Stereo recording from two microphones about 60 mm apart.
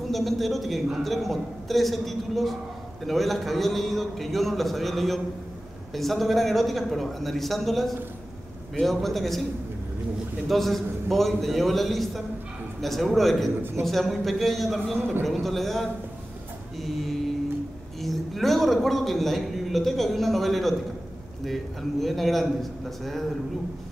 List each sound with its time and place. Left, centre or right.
0.1 s a man's voice: centre
8.9 s a man's voice: centre
10.5 s a man's voice: centre
22.0 s a man's voice: centre